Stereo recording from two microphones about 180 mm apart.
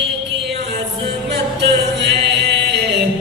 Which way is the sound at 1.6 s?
70° right (ahead or behind).